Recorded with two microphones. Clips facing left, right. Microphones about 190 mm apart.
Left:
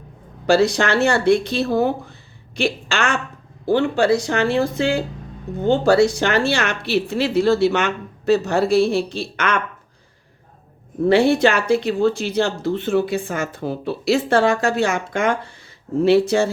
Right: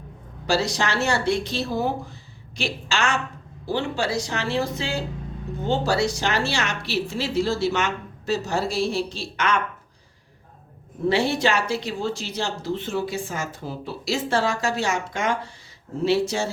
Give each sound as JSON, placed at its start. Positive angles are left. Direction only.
{"t": 0.4, "sound": "speech", "side_deg": 60}
{"t": 11.1, "sound": "speech", "side_deg": 55}